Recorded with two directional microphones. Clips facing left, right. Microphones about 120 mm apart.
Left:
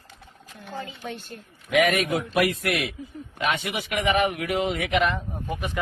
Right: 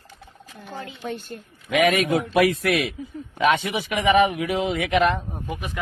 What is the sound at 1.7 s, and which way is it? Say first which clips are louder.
Speech: right 2 dB; 90° right.